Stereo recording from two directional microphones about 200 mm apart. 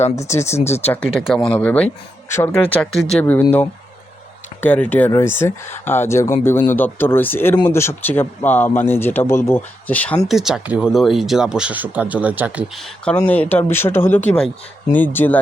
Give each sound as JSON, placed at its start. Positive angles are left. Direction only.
{"t": 0.2, "sound": "speech", "side_deg": 15}
{"t": 0.4, "sound": "speech", "side_deg": 35}
{"t": 1.5, "sound": "speech", "side_deg": 5}
{"t": 4.6, "sound": "speech", "side_deg": 10}